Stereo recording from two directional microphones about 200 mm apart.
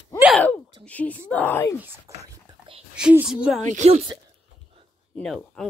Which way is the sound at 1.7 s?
10° right (ahead or behind).